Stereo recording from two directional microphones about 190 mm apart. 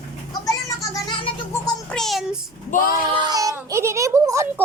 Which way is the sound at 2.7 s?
45° left (ahead or behind).